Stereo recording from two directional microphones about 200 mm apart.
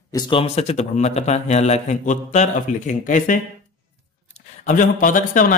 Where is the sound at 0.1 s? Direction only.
25° left (ahead or behind).